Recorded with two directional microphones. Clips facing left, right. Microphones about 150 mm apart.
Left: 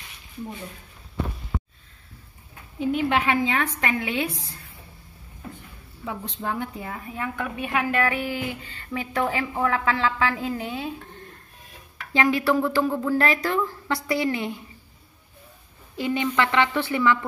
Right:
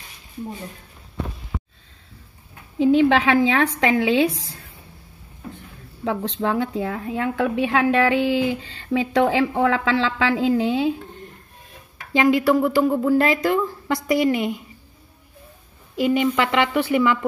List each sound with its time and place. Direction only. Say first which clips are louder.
2.8 s a woman's voice: right 7 dB; 90° right
6.4 s a woman's voice: right 7 dB; 90° right
12.1 s speech: right 4 dB; 15° right (ahead or behind)
16.0 s speech: right 5 dB; 10° right (ahead or behind)